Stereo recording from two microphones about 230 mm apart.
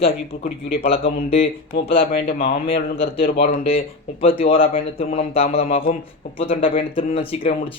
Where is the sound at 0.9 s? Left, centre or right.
Left.